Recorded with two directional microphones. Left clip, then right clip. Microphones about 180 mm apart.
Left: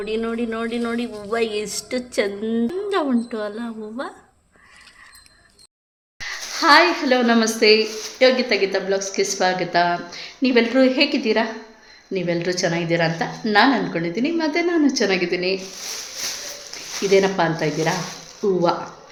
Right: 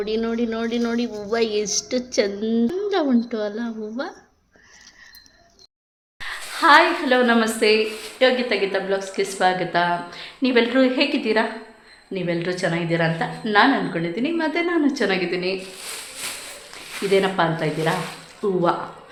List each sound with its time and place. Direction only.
0.0 s speech: 5° right (ahead or behind)
6.1 s a woman's voice: 15° left (ahead or behind)
16.7 s speech: 15° left (ahead or behind)